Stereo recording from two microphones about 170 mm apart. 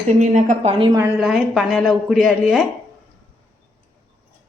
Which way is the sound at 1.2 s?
Centre (ahead or behind).